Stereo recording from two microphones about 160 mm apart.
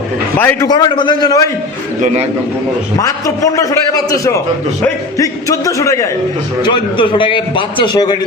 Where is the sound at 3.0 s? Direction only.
20° left (ahead or behind).